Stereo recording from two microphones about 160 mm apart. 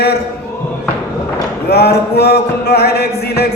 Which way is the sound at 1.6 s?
90° left.